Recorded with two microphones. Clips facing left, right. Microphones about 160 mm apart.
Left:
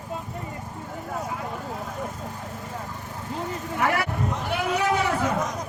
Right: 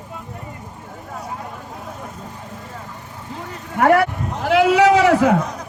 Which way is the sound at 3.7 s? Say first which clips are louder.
Right 11 dB; 55° right (ahead or behind).